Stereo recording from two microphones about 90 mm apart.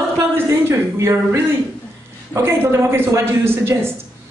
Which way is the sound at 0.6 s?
30° right (ahead or behind).